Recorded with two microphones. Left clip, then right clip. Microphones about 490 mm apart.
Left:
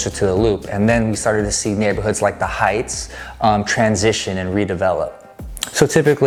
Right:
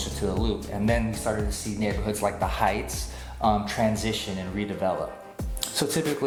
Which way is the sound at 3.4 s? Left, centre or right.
Left.